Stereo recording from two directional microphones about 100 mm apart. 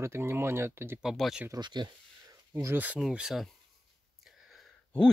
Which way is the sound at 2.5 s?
25° right (ahead or behind).